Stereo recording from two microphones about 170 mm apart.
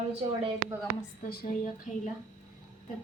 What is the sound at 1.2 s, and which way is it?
Speech, 65° left (ahead or behind).